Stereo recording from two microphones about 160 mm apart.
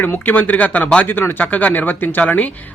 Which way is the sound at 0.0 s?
10° left (ahead or behind).